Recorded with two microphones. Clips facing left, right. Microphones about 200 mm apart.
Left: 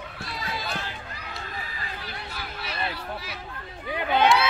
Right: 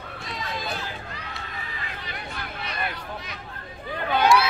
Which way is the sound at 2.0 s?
5° left (ahead or behind).